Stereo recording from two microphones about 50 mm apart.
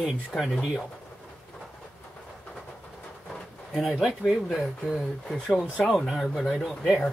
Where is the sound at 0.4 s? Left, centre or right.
Centre.